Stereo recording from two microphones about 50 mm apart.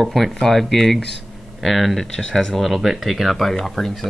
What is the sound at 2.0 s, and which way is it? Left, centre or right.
Speech, centre.